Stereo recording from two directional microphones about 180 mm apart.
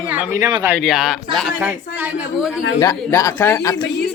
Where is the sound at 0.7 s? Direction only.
Centre (ahead or behind).